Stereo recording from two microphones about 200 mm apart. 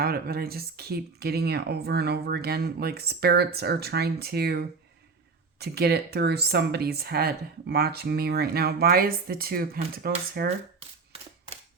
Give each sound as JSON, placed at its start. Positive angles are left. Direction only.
{"t": 0.0, "sound": "speech", "side_deg": -50}